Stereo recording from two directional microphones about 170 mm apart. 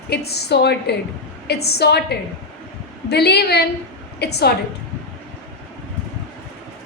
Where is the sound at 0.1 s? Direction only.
70° left (ahead or behind).